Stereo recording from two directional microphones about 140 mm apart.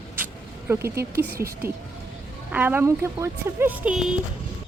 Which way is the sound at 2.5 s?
10° right (ahead or behind).